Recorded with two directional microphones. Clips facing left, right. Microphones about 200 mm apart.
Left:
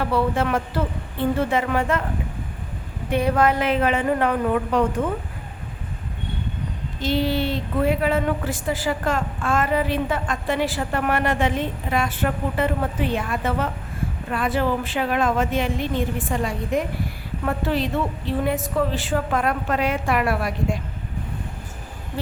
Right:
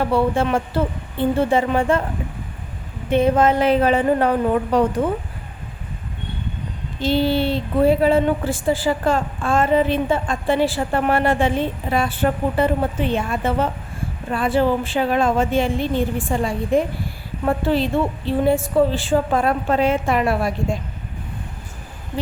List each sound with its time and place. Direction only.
0.0 s speech: 25° right (ahead or behind)
3.1 s speech: 25° right (ahead or behind)
7.0 s speech: 30° right (ahead or behind)